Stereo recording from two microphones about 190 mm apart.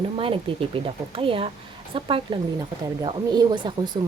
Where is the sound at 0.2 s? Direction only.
30° right (ahead or behind).